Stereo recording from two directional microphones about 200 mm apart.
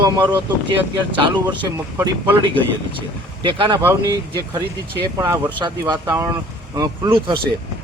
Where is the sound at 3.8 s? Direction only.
10° right (ahead or behind).